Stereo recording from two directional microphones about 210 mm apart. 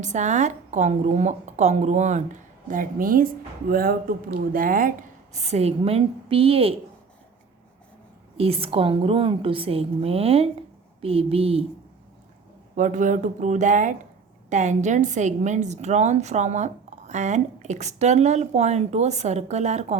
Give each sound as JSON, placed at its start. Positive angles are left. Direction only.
{"t": 0.0, "sound": "a woman's voice", "side_deg": -35}
{"t": 8.4, "sound": "a woman's voice", "side_deg": -30}
{"t": 12.7, "sound": "a woman's voice", "side_deg": -35}